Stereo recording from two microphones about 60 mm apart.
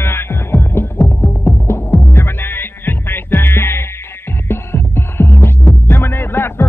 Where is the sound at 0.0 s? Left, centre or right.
Left.